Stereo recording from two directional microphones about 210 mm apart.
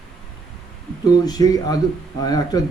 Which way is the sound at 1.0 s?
20° left (ahead or behind).